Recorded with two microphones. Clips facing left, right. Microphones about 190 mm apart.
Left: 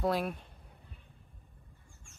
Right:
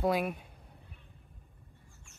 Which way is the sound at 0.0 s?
Centre (ahead or behind).